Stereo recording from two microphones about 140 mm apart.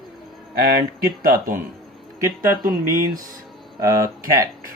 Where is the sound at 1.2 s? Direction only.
90° right.